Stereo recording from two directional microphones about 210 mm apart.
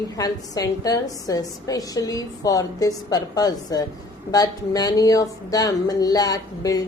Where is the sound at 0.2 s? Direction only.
15° left (ahead or behind).